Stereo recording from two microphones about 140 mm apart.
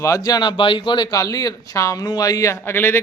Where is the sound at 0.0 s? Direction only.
25° left (ahead or behind).